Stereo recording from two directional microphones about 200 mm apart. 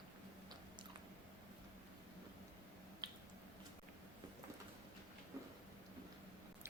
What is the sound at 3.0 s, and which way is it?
Finger snapping, 20° right (ahead or behind).